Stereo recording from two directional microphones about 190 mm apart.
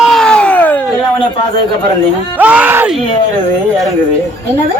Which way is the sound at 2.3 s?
10° right (ahead or behind).